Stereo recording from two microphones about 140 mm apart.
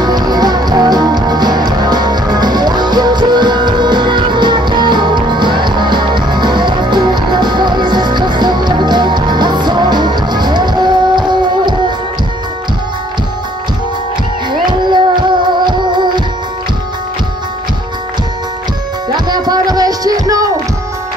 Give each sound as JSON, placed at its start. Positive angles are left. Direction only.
{"t": 0.0, "sound": "music", "side_deg": -30}
{"t": 14.5, "sound": "music", "side_deg": -35}
{"t": 19.1, "sound": "music", "side_deg": -30}